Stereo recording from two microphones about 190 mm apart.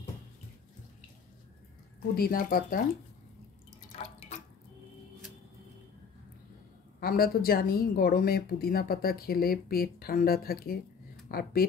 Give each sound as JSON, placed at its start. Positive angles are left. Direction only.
{"t": 2.1, "sound": "speech", "side_deg": 50}
{"t": 3.9, "sound": "drip", "side_deg": 35}
{"t": 7.0, "sound": "speech", "side_deg": 50}